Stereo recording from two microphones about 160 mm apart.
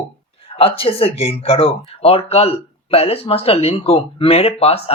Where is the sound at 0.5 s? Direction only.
35° left (ahead or behind).